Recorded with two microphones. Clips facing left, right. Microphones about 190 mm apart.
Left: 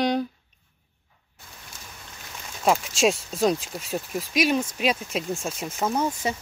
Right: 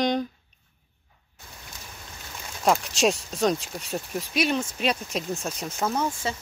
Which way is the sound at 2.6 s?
Centre (ahead or behind).